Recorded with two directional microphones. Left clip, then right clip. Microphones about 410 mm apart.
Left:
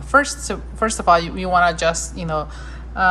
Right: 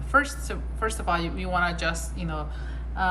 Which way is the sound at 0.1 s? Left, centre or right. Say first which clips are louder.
Left 7 dB; centre.